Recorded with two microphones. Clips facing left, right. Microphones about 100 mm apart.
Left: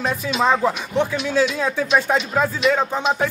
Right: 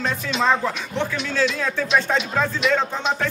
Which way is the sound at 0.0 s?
10° left (ahead or behind).